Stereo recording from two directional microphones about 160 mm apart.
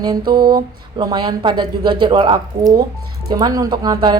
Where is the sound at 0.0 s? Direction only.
25° right (ahead or behind).